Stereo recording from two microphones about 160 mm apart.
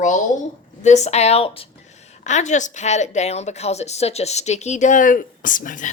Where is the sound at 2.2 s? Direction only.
50° left (ahead or behind).